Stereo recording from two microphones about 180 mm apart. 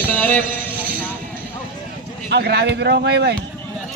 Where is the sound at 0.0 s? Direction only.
10° left (ahead or behind).